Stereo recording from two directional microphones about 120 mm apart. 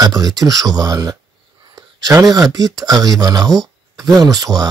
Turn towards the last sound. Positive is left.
turn(degrees=-30)  # may be behind; listen again after turning